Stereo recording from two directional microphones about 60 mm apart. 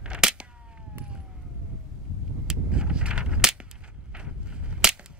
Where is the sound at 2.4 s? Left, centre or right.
Centre.